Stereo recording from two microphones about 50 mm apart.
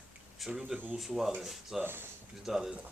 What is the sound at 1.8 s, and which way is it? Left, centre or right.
Speech, right.